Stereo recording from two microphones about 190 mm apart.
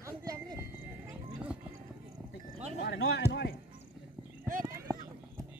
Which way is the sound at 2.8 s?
75° left (ahead or behind).